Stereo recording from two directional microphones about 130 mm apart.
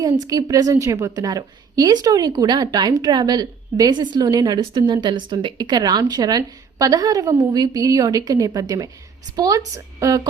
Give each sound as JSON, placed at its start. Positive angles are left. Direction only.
{"t": 0.2, "sound": "a woman's voice", "side_deg": -30}